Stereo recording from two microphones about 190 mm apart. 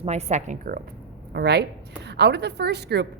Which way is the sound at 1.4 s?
60° right (ahead or behind).